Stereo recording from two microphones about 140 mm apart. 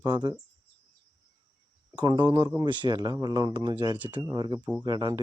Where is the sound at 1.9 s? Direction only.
35° right (ahead or behind).